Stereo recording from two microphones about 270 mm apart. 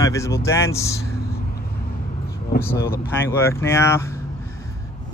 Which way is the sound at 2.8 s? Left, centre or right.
Left.